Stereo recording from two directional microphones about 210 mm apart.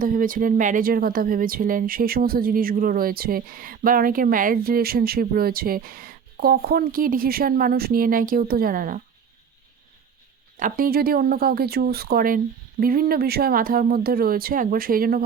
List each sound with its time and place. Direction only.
0.0 s speech: 40° right (ahead or behind)
10.6 s speech: 45° right (ahead or behind)